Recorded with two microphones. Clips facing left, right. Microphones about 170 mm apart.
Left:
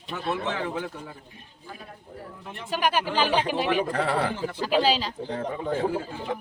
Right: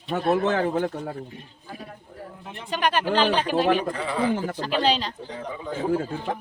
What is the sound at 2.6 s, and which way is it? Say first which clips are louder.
Speech: right 2 dB; 5° left (ahead or behind).